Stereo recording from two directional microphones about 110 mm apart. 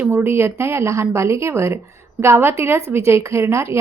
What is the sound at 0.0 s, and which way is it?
Speech, 20° right (ahead or behind).